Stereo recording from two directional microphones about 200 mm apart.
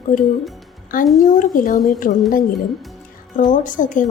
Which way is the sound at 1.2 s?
40° left (ahead or behind).